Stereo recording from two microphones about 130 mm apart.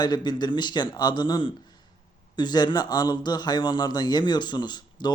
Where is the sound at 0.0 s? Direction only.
35° left (ahead or behind).